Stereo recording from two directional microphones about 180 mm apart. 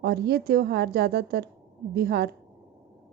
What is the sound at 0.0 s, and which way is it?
A woman's voice, 65° right (ahead or behind).